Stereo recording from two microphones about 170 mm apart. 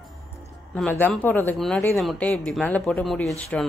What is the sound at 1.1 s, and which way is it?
Speech, 10° left (ahead or behind).